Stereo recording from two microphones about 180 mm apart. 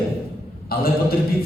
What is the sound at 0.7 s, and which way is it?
Speech, 55° left (ahead or behind).